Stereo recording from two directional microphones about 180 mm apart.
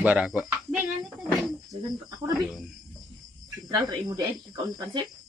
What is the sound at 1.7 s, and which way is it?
Speech, 20° right (ahead or behind).